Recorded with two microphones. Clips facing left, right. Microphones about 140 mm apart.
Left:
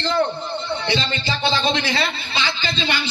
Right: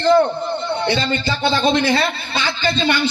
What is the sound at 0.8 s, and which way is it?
A man's voice, 50° right (ahead or behind).